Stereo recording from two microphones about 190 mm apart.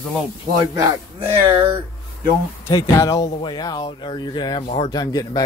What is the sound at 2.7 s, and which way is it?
Speech, 15° left (ahead or behind).